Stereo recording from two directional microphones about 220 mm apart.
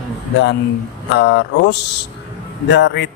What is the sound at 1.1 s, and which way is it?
Speech, 50° left (ahead or behind).